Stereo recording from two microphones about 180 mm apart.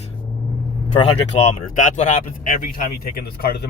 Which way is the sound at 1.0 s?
40° left (ahead or behind).